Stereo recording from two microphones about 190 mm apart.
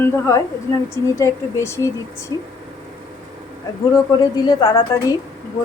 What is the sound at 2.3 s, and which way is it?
Speech, 20° right (ahead or behind).